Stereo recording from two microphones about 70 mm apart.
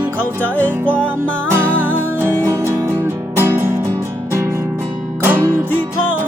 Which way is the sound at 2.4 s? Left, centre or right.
Right.